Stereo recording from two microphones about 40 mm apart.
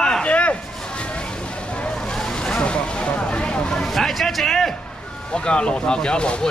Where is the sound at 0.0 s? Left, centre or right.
Centre.